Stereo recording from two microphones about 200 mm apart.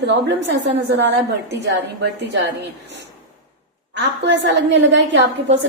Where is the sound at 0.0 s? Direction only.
60° right (ahead or behind).